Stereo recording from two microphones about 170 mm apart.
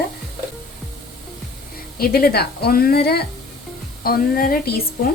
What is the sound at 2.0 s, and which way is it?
A woman's voice, 65° left (ahead or behind).